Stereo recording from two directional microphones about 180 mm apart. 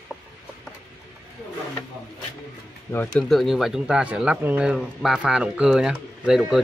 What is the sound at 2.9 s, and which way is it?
Speech, 10° left (ahead or behind).